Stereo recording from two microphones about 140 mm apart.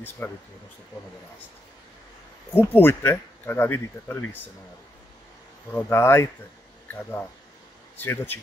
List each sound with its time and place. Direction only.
0.2 s speech: 15° left (ahead or behind)
2.6 s speech: 15° left (ahead or behind)
5.7 s speech: 15° left (ahead or behind)